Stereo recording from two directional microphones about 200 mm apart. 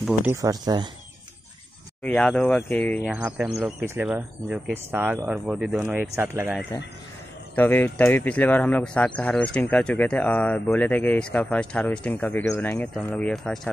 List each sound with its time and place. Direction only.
0.0 s speech: 10° right (ahead or behind)
2.0 s speech: 5° left (ahead or behind); by 6.6 s 10° right (ahead or behind)
7.5 s speech: 10° left (ahead or behind)